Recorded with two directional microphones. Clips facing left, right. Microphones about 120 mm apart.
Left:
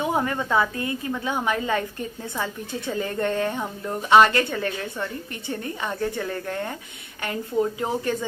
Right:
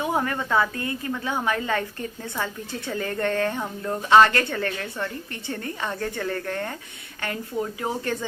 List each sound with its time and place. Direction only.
0.0 s a woman's voice: 20° left (ahead or behind)